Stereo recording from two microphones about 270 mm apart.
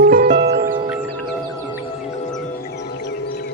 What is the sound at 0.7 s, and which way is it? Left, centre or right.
Music, centre.